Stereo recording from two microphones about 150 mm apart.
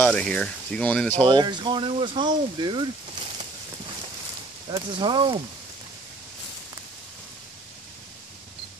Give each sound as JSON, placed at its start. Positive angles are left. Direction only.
{"t": 0.0, "sound": "speech", "side_deg": 5}
{"t": 1.2, "sound": "speech", "side_deg": -30}
{"t": 4.6, "sound": "speech", "side_deg": -30}